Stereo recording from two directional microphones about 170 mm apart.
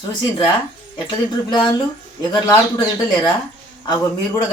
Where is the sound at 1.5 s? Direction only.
25° left (ahead or behind).